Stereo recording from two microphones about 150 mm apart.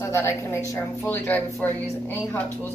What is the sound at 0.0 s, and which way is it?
A woman's voice, 15° left (ahead or behind).